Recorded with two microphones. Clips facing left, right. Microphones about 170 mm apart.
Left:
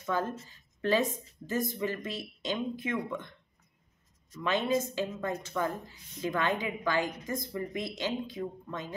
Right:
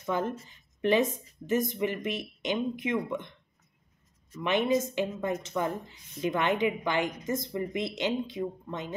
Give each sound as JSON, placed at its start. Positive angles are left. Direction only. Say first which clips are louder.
{"t": 0.0, "sound": "speech", "louder": "right 2 dB", "side_deg": -20}
{"t": 4.4, "sound": "speech", "louder": "right 3 dB", "side_deg": -20}